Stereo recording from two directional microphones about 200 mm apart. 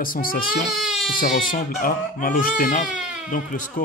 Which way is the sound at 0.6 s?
Centre (ahead or behind).